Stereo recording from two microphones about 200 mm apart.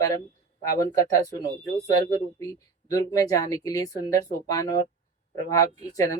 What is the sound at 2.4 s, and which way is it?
Speech, 15° left (ahead or behind).